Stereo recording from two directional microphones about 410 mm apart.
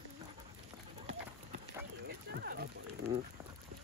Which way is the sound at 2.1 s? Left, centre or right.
Right.